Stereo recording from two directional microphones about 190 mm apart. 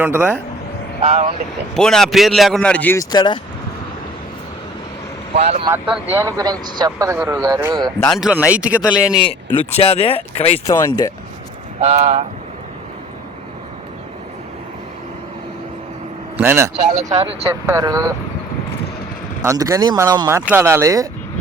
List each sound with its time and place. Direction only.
0.0 s speech: 10° right (ahead or behind)
1.0 s speech: 35° right (ahead or behind)
1.7 s speech: 5° left (ahead or behind); by 3.3 s 20° left (ahead or behind)
5.3 s speech: 30° right (ahead or behind)
5.7 s speech: 10° right (ahead or behind)
8.1 s speech: 5° right (ahead or behind)
9.2 s speech: 30° left (ahead or behind)
10.7 s speech: 15° left (ahead or behind)
11.8 s speech: 35° right (ahead or behind)
16.4 s speech: 15° right (ahead or behind)
16.9 s speech: 40° right (ahead or behind)
17.2 s speech: 15° right (ahead or behind)
19.4 s speech: 15° right (ahead or behind)